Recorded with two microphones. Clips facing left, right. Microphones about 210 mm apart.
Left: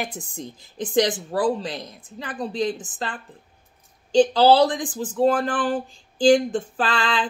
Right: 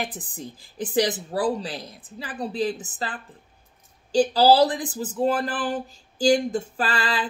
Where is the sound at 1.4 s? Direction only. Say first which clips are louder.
Left 2 dB; 35° right (ahead or behind).